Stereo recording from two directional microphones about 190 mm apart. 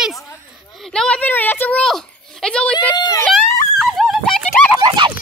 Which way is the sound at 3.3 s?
Centre (ahead or behind).